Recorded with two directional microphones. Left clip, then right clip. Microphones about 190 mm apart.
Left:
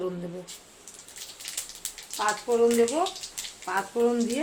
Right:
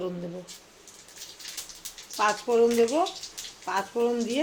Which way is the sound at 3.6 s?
Centre (ahead or behind).